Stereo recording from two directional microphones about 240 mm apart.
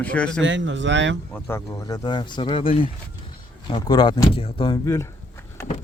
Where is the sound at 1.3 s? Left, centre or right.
Centre.